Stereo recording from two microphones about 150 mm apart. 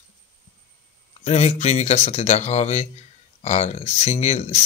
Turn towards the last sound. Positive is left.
turn(degrees=50)  # may be behind; listen again after turning